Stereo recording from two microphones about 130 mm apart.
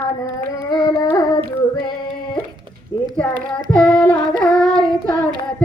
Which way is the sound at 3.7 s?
5° left (ahead or behind).